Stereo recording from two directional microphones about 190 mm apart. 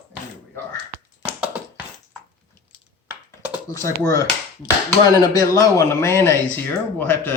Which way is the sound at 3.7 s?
15° left (ahead or behind).